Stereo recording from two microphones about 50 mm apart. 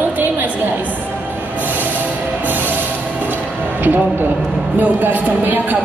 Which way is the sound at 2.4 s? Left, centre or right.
Right.